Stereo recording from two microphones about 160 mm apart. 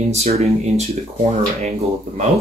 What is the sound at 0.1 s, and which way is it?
Speech, 40° right (ahead or behind).